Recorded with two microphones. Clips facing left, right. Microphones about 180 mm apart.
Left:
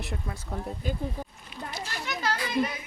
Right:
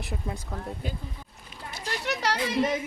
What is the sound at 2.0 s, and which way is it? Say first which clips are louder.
Chatter: right 3 dB; 75° right (ahead or behind).